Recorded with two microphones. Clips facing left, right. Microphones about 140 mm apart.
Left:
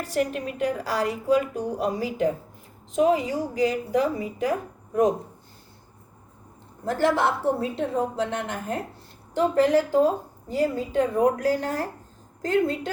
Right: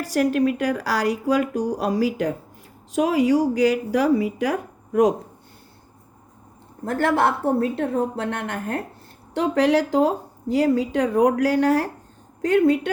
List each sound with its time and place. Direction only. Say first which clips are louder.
0.0 s speech: right 6 dB; 80° right
6.8 s a woman's voice: right 2 dB; 60° right (ahead or behind)
9.3 s speech: right 1 dB; 75° right (ahead or behind)